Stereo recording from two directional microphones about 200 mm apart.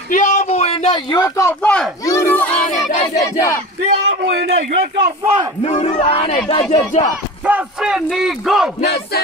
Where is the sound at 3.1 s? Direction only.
15° left (ahead or behind).